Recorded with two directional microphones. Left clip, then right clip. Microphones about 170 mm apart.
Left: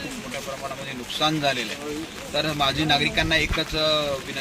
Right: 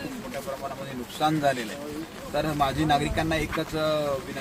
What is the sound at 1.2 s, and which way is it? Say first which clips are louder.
Speech: left 1 dB; 10° right (ahead or behind).